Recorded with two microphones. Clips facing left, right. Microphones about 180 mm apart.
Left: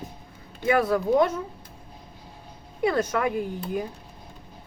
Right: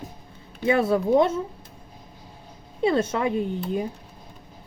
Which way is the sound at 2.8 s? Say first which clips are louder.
Right 2 dB; 25° right (ahead or behind).